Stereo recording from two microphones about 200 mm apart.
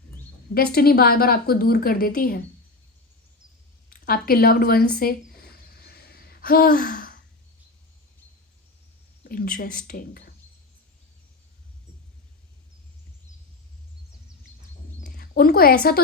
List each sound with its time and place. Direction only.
0.5 s a woman's voice: 50° left (ahead or behind)
3.8 s speech: 45° left (ahead or behind)
5.8 s gasp: 50° left (ahead or behind)
9.3 s a woman's voice: 45° left (ahead or behind)
15.0 s speech: 45° left (ahead or behind)